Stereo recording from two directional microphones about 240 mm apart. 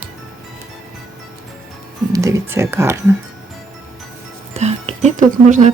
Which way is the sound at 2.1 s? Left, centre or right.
Centre.